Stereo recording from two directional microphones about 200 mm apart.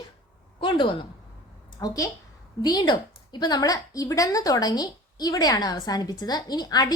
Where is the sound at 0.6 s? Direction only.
25° left (ahead or behind).